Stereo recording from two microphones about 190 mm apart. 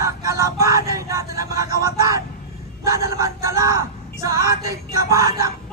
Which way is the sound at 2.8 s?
15° right (ahead or behind).